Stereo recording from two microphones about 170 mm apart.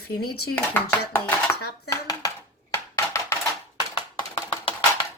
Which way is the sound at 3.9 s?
25° left (ahead or behind).